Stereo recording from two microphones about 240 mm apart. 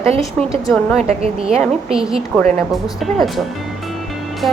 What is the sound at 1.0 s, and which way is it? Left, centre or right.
Speech, right.